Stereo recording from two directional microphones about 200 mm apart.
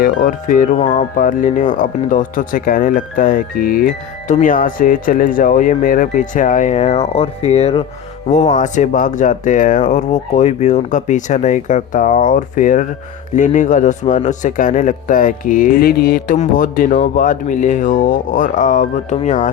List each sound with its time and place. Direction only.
0.0 s speech: 45° left (ahead or behind)
0.8 s music: 25° left (ahead or behind)
1.1 s speech: 40° left (ahead or behind)